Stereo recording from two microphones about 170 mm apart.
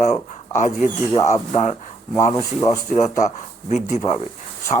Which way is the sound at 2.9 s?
40° left (ahead or behind).